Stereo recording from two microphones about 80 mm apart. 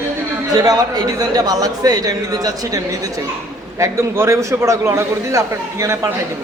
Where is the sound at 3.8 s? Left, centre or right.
Right.